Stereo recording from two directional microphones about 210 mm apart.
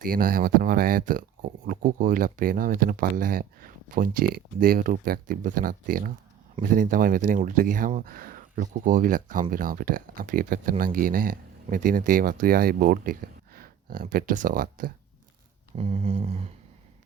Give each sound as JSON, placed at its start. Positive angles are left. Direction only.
{"t": 0.0, "sound": "speech", "side_deg": -40}
{"t": 15.7, "sound": "speech", "side_deg": -30}